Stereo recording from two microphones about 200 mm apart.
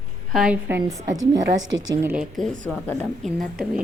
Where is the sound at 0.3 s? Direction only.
5° right (ahead or behind).